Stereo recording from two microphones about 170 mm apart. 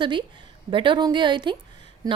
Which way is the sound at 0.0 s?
30° right (ahead or behind).